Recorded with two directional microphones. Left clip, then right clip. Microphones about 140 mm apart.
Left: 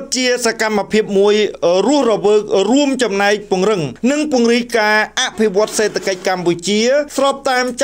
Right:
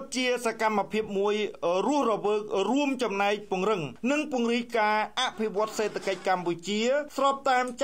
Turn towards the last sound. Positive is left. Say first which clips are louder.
# left 10 dB
turn(degrees=20)  # may be behind; listen again after turning